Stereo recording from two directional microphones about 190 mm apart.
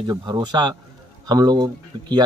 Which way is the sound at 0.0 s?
20° right (ahead or behind).